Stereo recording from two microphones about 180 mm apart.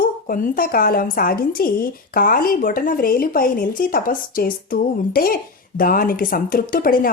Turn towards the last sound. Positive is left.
turn(degrees=50)  # may be behind; listen again after turning